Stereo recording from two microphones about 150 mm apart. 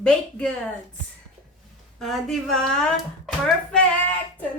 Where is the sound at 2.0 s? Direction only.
5° left (ahead or behind).